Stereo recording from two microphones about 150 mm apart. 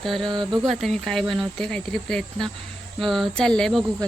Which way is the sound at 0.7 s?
Centre (ahead or behind).